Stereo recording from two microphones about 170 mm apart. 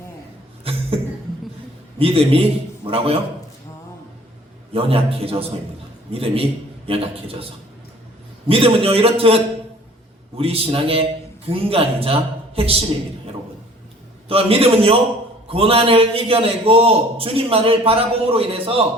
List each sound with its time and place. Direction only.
0.6 s a sound: 35° right (ahead or behind)
2.0 s a man's voice: 35° right (ahead or behind)
4.7 s a man's voice: 35° right (ahead or behind)
8.4 s a man's voice: 35° right (ahead or behind)
14.3 s a man's voice: 35° right (ahead or behind)